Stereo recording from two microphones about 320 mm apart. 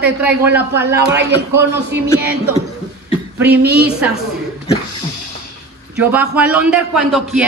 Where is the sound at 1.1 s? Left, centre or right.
Right.